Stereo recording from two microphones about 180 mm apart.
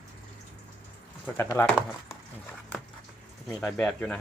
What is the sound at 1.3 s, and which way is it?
Speech, 15° left (ahead or behind).